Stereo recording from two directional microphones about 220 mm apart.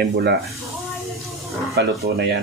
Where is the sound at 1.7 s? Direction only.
45° right (ahead or behind).